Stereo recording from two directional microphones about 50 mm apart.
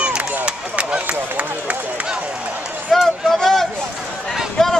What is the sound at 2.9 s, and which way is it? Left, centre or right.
Run, centre.